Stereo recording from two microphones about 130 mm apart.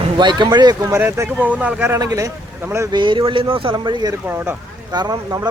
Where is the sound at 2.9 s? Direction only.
35° right (ahead or behind).